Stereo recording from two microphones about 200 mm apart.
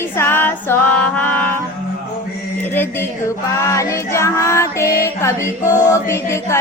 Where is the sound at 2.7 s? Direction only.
10° left (ahead or behind).